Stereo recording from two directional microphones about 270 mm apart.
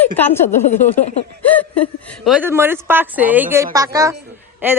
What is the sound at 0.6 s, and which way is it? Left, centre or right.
Speech, left.